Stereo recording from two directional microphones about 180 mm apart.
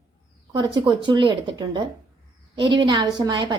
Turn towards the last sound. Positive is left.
turn(degrees=-25)  # may be behind; listen again after turning